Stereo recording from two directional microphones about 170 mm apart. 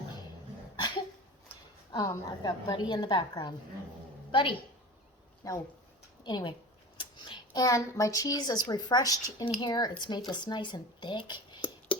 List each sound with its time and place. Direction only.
1.9 s a woman's voice: 25° left (ahead or behind)